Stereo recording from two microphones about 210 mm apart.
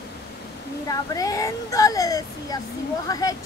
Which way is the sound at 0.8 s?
15° left (ahead or behind).